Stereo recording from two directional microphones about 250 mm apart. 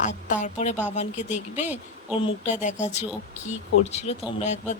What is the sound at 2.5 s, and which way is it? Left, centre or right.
Speech, left.